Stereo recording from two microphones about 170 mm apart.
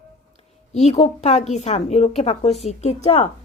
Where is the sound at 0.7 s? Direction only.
40° left (ahead or behind).